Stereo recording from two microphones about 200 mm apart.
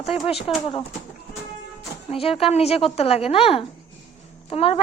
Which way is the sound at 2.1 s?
30° left (ahead or behind).